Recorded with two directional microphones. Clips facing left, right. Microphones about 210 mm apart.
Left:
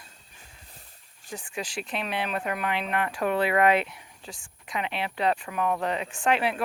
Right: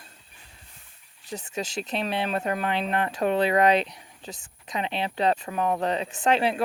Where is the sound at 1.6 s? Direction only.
25° right (ahead or behind).